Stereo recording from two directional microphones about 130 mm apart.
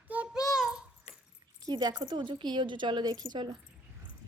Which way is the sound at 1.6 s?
30° right (ahead or behind).